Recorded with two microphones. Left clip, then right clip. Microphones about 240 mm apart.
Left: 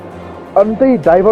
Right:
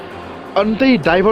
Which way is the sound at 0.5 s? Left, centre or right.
Right.